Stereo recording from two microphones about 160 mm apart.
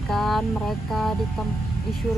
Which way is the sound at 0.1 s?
Centre (ahead or behind).